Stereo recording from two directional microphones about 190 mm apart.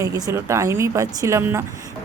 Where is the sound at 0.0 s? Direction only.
15° right (ahead or behind).